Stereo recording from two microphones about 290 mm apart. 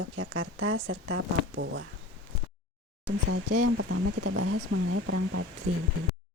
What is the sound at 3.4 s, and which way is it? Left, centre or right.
Speech, right.